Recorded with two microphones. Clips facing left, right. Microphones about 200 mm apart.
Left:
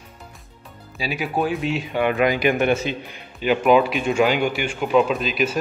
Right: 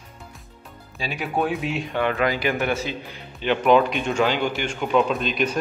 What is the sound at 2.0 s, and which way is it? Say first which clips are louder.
Speech: left 3 dB; 15° left (ahead or behind).